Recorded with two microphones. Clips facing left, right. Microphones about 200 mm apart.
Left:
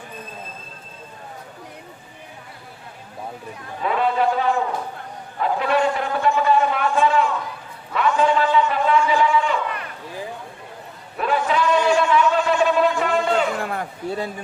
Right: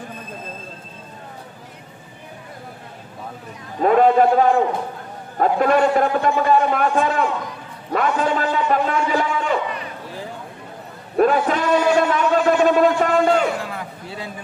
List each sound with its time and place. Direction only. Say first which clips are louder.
3.8 s a man's voice: right 7 dB; 45° right (ahead or behind)
11.2 s a man's voice: right 4 dB; 45° right (ahead or behind)
13.6 s a man's voice: left 3 dB; 50° left (ahead or behind)